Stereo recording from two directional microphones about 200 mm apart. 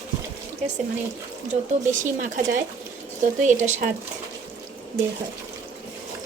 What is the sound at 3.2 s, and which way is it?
Speech, 35° right (ahead or behind).